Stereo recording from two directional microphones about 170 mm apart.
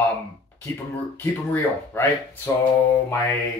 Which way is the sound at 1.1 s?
15° left (ahead or behind).